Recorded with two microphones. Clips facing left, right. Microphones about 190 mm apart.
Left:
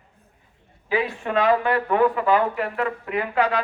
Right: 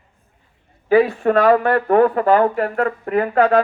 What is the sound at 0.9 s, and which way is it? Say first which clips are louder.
Speech: right 10 dB; 45° right (ahead or behind).